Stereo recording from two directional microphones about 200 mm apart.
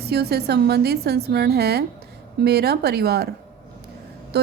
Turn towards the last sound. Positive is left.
turn(degrees=-55)  # may be behind; listen again after turning